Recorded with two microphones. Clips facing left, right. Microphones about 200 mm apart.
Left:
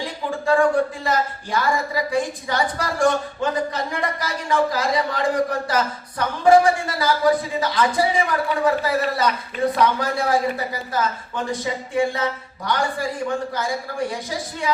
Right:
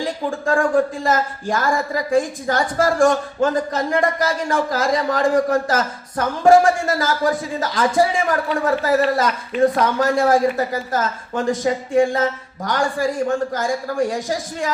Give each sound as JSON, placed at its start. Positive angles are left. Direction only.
{"t": 0.3, "sound": "a woman's voice", "side_deg": -50}